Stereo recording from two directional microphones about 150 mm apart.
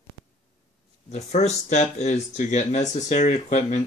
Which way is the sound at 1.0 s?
50° left (ahead or behind).